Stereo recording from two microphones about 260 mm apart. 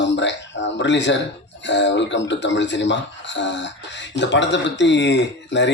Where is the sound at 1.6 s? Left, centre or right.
Left.